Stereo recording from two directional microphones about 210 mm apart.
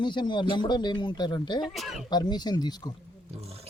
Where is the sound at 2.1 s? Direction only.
20° left (ahead or behind).